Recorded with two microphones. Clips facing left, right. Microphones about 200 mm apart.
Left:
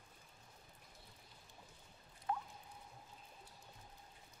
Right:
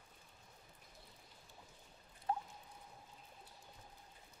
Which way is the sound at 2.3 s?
30° right (ahead or behind).